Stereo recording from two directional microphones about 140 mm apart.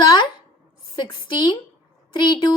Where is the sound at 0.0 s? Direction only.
30° left (ahead or behind).